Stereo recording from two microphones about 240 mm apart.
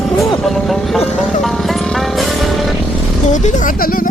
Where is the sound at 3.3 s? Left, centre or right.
Left.